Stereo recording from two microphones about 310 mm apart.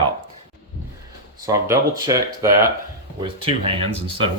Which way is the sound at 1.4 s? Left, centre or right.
Centre.